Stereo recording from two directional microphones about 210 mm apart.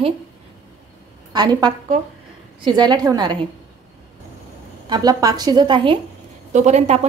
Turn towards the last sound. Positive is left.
turn(degrees=-35)  # may be behind; listen again after turning